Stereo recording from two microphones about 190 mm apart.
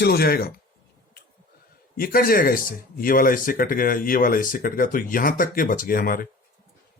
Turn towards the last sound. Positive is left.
turn(degrees=50)  # may be behind; listen again after turning